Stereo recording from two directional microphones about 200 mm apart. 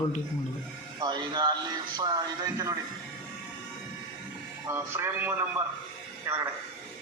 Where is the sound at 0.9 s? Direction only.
20° right (ahead or behind).